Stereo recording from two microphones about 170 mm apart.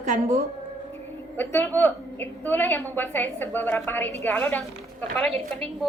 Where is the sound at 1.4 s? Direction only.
10° left (ahead or behind).